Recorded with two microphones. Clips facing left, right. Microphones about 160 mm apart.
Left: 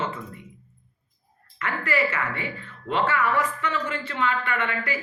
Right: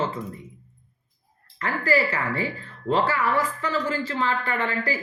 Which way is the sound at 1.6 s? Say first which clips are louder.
Right 3 dB; 35° right (ahead or behind).